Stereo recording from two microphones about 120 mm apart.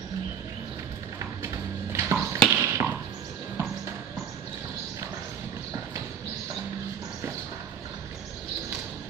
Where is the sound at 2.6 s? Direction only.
20° right (ahead or behind).